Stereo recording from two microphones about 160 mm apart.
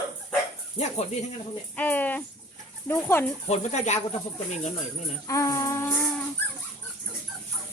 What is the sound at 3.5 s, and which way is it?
Speech, 45° left (ahead or behind).